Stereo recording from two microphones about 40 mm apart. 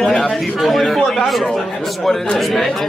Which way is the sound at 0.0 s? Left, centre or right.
Centre.